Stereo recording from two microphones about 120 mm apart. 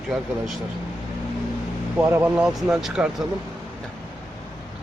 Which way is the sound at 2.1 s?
5° right (ahead or behind).